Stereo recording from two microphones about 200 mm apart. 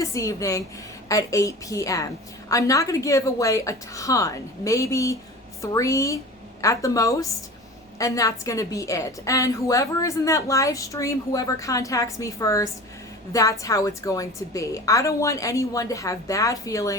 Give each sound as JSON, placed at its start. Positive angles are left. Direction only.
{"t": 0.0, "sound": "a woman's voice", "side_deg": 15}